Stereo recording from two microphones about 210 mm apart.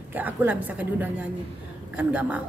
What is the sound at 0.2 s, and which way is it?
Speech, 10° right (ahead or behind).